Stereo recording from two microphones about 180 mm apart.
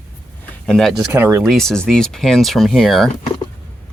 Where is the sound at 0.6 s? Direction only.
5° left (ahead or behind).